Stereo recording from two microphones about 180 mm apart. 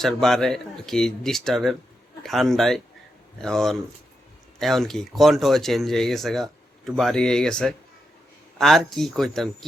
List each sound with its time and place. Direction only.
0.0 s speech: centre (ahead or behind)